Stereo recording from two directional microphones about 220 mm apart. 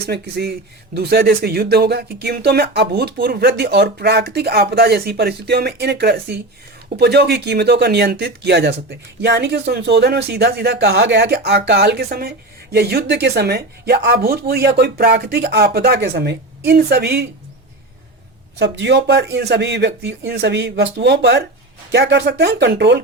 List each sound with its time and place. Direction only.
0.1 s speech: 50° right (ahead or behind)
18.6 s speech: 50° right (ahead or behind)